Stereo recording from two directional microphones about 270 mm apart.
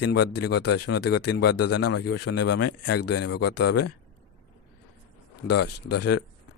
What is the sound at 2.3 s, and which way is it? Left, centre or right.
Speech, left.